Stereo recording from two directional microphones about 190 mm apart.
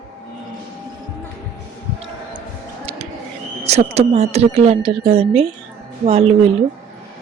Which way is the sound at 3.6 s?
35° right (ahead or behind).